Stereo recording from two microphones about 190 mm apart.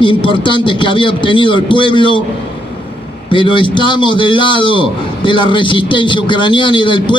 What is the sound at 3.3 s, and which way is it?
A man's voice, 25° left (ahead or behind).